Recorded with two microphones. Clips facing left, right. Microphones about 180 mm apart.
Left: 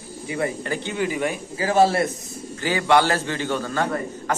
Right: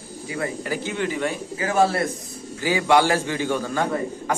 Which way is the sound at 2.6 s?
10° right (ahead or behind).